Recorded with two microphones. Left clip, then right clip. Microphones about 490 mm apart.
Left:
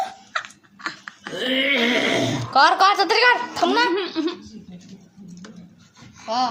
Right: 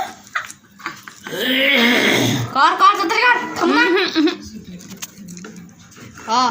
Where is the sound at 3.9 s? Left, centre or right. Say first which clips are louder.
Right 8 dB; right.